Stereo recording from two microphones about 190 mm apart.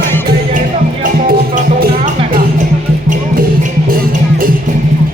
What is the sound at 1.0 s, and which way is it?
Music, 45° right (ahead or behind).